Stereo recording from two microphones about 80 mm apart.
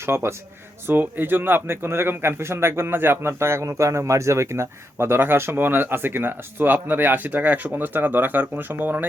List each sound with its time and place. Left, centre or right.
0.0 s a man's voice: right